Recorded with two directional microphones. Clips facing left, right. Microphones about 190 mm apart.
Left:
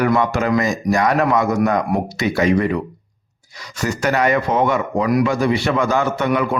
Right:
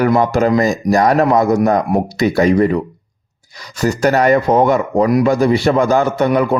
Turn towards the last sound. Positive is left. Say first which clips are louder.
# right 5 dB
turn(degrees=-40)  # may be behind; listen again after turning